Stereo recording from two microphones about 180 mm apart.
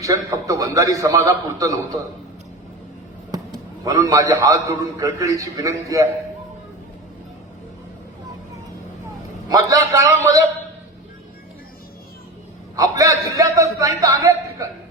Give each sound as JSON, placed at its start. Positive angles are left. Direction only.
{"t": 0.0, "sound": "a man's voice", "side_deg": -20}
{"t": 3.3, "sound": "a man's voice", "side_deg": -20}
{"t": 9.5, "sound": "a man's voice", "side_deg": -20}
{"t": 12.7, "sound": "a man's voice", "side_deg": -20}